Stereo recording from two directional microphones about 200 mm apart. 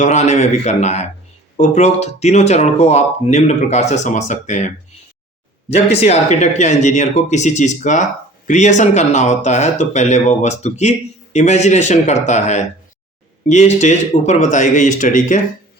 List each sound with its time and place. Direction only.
0.0 s speech: 35° left (ahead or behind)
5.7 s speech: 30° left (ahead or behind)